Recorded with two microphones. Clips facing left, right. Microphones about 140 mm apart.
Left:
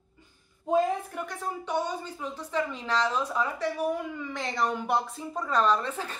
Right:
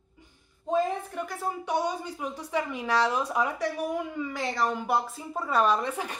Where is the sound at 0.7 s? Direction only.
Centre (ahead or behind).